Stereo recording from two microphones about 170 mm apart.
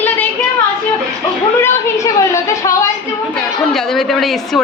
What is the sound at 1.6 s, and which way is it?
A woman's voice, 20° left (ahead or behind).